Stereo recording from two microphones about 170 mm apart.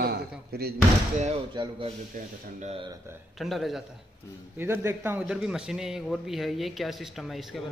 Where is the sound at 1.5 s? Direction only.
25° right (ahead or behind).